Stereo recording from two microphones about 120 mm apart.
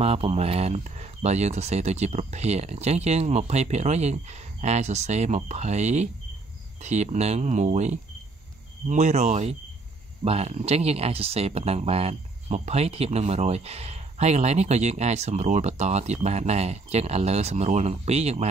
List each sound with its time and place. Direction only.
0.0 s speech: 60° right (ahead or behind)